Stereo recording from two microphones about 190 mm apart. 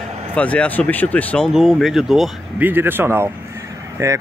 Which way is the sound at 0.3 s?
5° left (ahead or behind).